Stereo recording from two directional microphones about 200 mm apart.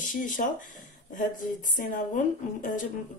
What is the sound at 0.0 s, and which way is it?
Speech, 40° left (ahead or behind).